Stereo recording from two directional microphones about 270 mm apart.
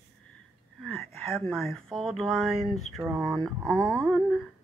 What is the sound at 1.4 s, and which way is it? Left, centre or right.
Speech, centre.